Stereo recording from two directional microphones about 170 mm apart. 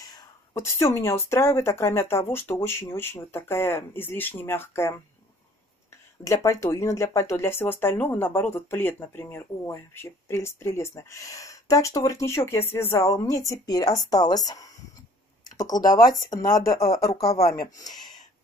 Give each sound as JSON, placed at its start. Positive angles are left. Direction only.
{"t": 0.0, "sound": "speech", "side_deg": 20}
{"t": 6.2, "sound": "speech", "side_deg": 20}